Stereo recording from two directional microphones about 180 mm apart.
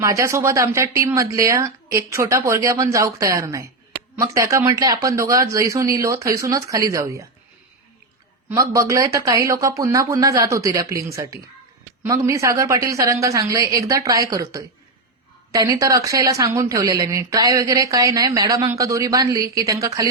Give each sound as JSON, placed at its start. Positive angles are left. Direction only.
{"t": 0.0, "sound": "speech", "side_deg": -15}
{"t": 8.4, "sound": "speech", "side_deg": -15}